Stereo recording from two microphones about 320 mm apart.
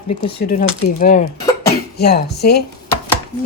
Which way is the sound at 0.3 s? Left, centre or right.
Left.